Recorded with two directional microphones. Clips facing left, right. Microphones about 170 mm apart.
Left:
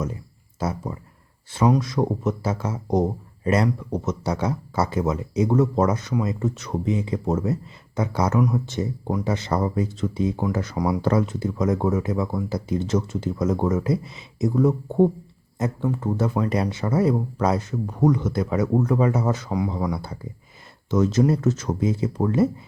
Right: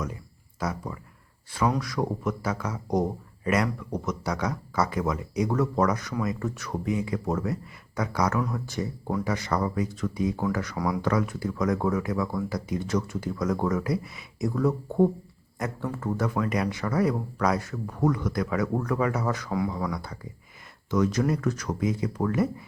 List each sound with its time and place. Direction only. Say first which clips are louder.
0.6 s speech: left 4 dB; 25° left (ahead or behind)